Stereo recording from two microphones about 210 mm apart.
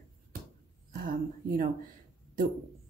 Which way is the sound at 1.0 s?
40° right (ahead or behind).